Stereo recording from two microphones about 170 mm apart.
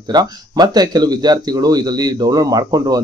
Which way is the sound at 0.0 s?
25° right (ahead or behind).